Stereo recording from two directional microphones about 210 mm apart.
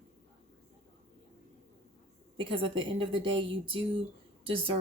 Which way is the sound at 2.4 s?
25° right (ahead or behind).